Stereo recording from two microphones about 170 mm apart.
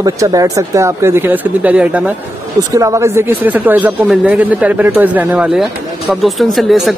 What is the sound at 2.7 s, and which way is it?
Speech, 20° right (ahead or behind).